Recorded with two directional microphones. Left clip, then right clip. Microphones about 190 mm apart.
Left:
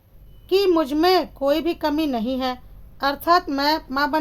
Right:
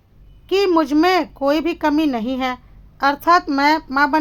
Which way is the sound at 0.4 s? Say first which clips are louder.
Right 2 dB; 15° right (ahead or behind).